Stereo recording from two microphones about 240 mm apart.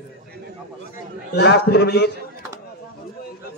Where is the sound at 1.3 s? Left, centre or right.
Left.